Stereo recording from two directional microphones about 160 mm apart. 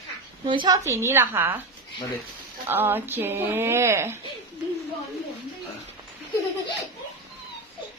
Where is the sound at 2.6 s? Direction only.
15° right (ahead or behind).